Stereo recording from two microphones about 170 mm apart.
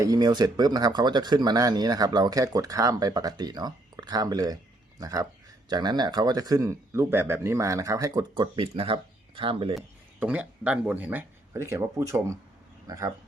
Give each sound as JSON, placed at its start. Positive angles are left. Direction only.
{"t": 0.0, "sound": "speech", "side_deg": -25}
{"t": 10.2, "sound": "speech", "side_deg": -10}